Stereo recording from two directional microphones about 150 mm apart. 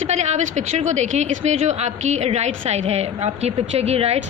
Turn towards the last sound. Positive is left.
turn(degrees=-45)  # may be behind; listen again after turning